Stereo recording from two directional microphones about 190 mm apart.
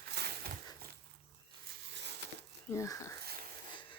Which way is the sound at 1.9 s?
65° right (ahead or behind).